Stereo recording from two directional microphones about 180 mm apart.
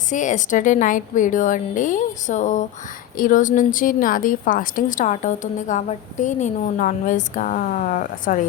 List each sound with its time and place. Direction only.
0.1 s a woman's voice: 45° left (ahead or behind)